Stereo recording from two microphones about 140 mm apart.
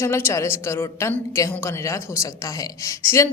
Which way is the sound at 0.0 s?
20° left (ahead or behind).